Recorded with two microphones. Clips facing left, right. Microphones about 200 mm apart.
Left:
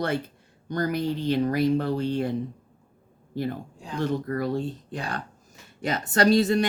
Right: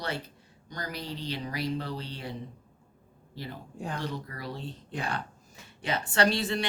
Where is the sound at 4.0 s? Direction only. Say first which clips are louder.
Left 10 dB; 50° left (ahead or behind).